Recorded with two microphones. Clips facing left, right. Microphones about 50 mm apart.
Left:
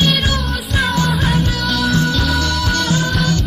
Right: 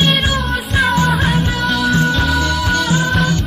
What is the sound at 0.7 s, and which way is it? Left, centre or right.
Music, right.